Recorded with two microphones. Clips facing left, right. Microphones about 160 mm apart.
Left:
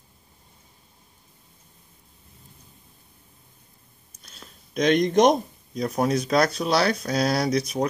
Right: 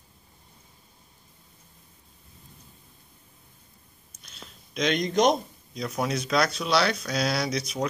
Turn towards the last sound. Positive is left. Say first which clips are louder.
# left 5 dB
turn(degrees=40)  # may be behind; listen again after turning